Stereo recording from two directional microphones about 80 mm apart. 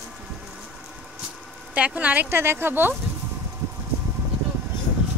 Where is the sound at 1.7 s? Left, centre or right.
Centre.